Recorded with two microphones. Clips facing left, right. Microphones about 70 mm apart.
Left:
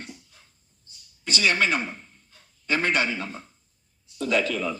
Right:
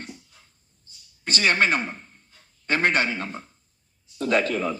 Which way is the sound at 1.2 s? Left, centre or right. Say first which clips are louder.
Right 2 dB; right.